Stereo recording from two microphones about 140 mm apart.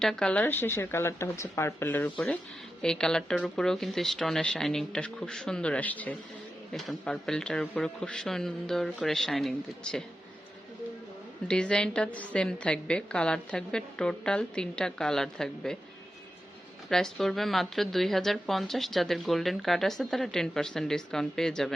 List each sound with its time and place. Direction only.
0.0 s a woman's voice: 5° left (ahead or behind)
11.4 s a woman's voice: 5° left (ahead or behind)
16.9 s speech: 5° left (ahead or behind)